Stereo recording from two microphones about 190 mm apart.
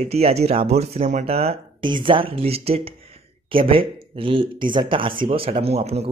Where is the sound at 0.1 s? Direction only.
35° right (ahead or behind).